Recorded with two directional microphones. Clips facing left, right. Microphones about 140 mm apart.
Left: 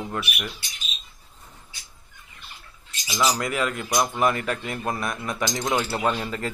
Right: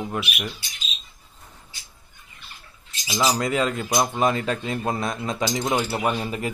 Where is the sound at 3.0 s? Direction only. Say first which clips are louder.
Right 2 dB; 25° right (ahead or behind).